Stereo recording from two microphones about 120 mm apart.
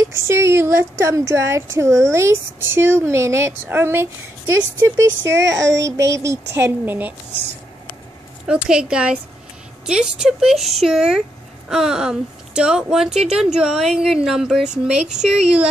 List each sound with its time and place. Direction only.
0.0 s speech: 25° right (ahead or behind)
8.5 s a woman's voice: 5° right (ahead or behind)